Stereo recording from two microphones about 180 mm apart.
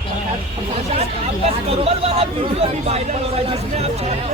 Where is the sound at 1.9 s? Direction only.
35° right (ahead or behind).